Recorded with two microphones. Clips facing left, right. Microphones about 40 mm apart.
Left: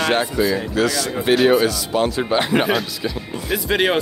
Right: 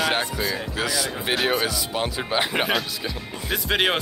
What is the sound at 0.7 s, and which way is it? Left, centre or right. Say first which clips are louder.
Speech: left 6 dB; centre.